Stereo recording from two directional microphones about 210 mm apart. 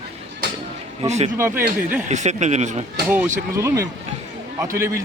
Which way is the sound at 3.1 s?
10° right (ahead or behind).